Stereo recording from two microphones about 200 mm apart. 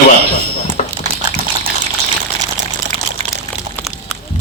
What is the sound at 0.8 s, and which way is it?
Dog, 40° left (ahead or behind).